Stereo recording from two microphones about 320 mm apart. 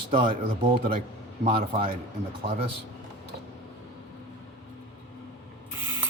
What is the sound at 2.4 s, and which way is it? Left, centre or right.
Speech, right.